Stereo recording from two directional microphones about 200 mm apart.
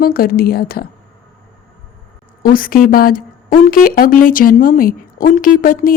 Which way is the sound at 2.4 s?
45° left (ahead or behind).